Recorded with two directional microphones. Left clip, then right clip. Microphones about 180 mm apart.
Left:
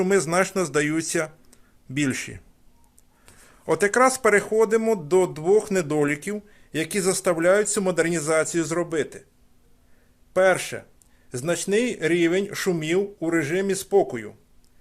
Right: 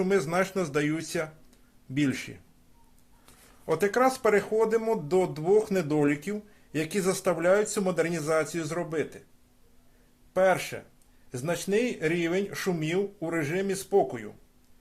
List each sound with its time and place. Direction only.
0.0 s speech: 40° left (ahead or behind)
3.7 s speech: 40° left (ahead or behind)
10.3 s speech: 50° left (ahead or behind)